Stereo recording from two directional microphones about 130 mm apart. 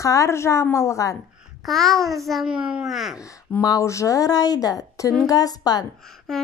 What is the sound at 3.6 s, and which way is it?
Speech, 25° left (ahead or behind).